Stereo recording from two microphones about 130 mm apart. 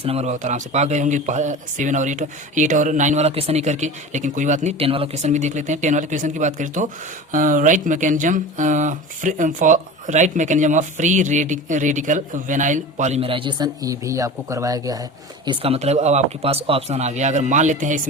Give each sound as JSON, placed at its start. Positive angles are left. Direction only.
{"t": 0.0, "sound": "speech", "side_deg": -50}
{"t": 0.3, "sound": "speech", "side_deg": -70}
{"t": 4.8, "sound": "speech", "side_deg": -50}
{"t": 5.2, "sound": "speech", "side_deg": -65}
{"t": 7.3, "sound": "speech", "side_deg": -90}
{"t": 13.2, "sound": "speech", "side_deg": -40}
{"t": 15.4, "sound": "speech", "side_deg": -50}